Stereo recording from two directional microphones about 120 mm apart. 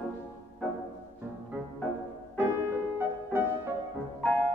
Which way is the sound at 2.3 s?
15° right (ahead or behind).